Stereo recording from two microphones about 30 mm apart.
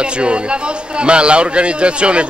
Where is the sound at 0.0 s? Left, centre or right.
Right.